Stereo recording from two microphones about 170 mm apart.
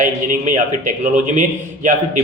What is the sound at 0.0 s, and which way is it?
A man's voice, 50° right (ahead or behind).